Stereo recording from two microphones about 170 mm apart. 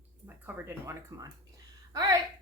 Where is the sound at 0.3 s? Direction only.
10° right (ahead or behind).